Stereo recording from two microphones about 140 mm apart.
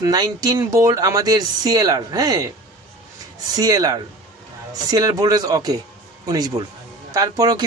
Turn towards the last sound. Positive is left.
turn(degrees=-30)  # may be behind; listen again after turning